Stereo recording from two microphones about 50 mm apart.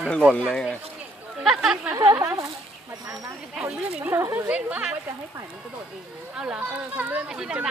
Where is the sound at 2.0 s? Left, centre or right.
Right.